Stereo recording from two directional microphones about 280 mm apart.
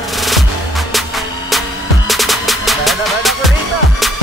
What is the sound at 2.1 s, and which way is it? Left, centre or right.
Music, centre.